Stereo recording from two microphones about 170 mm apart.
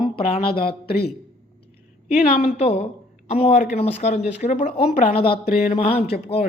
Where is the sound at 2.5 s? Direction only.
40° left (ahead or behind).